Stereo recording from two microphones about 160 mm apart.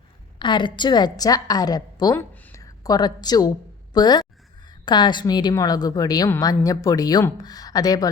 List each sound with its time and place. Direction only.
0.3 s a woman's voice: 30° left (ahead or behind)
2.3 s a sound: 15° left (ahead or behind)
3.9 s a woman's voice: 25° left (ahead or behind)